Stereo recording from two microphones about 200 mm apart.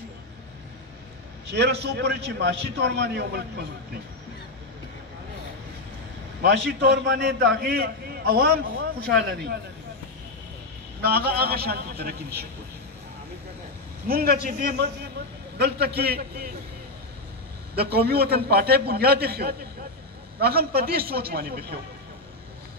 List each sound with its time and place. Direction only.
1.5 s a man's voice: 60° right (ahead or behind)
6.4 s a man's voice: 60° right (ahead or behind)
11.1 s a man's voice: 50° right (ahead or behind)
14.0 s a man's voice: 50° right (ahead or behind)
17.7 s a man's voice: 50° right (ahead or behind)